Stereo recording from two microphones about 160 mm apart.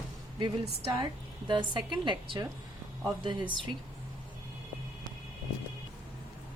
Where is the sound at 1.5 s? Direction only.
30° right (ahead or behind).